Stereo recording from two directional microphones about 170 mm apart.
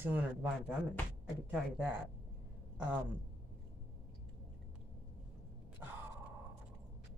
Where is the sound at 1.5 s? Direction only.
10° right (ahead or behind).